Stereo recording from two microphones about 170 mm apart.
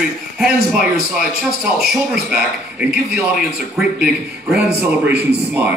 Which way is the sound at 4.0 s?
5° right (ahead or behind).